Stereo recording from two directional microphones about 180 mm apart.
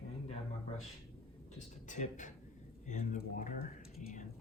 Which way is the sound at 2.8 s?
45° left (ahead or behind).